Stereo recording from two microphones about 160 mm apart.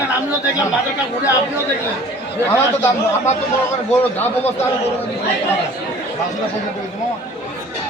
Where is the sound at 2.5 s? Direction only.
15° left (ahead or behind).